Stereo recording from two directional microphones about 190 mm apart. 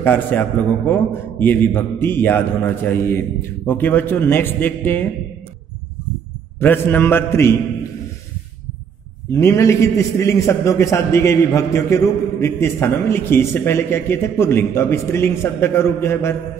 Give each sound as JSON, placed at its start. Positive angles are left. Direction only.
{"t": 0.0, "sound": "a man's voice", "side_deg": 10}
{"t": 6.6, "sound": "a man's voice", "side_deg": 10}
{"t": 9.3, "sound": "a man's voice", "side_deg": 15}